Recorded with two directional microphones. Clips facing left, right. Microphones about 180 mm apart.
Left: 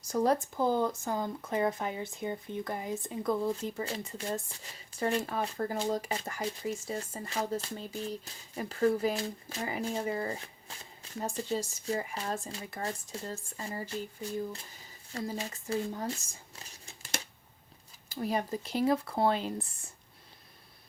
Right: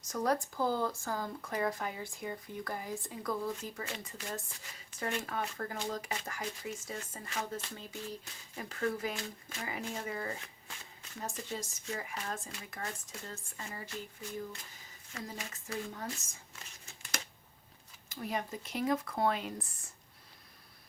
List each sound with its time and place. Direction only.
0.0 s speech: 30° left (ahead or behind)
16.8 s crumpling: 35° left (ahead or behind)
18.1 s speech: 35° left (ahead or behind)